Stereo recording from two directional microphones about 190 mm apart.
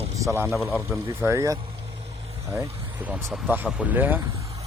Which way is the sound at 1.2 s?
15° right (ahead or behind).